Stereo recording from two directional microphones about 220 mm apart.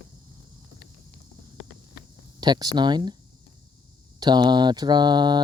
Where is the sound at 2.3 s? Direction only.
20° right (ahead or behind).